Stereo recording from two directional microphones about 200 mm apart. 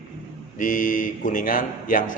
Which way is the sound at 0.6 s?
40° left (ahead or behind).